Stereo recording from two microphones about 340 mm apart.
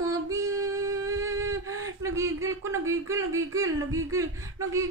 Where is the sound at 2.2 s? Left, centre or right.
Centre.